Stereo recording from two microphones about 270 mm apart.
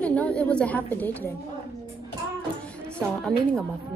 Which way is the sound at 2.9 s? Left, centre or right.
Centre.